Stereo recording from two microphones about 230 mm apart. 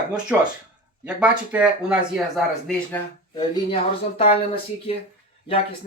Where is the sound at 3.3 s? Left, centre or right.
Left.